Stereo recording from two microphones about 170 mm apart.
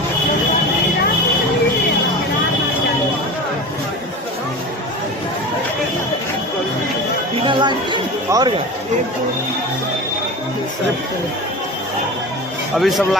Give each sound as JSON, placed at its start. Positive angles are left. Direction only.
{"t": 7.4, "sound": "chatter", "side_deg": -25}
{"t": 12.7, "sound": "speech", "side_deg": 0}